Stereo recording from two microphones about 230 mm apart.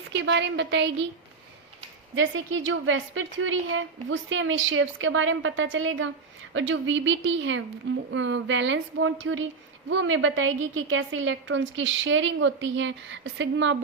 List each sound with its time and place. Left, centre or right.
0.1 s a woman's voice: right
2.1 s a woman's voice: right